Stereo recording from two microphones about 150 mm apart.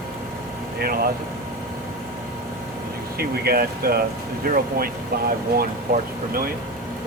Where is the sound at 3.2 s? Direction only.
90° right.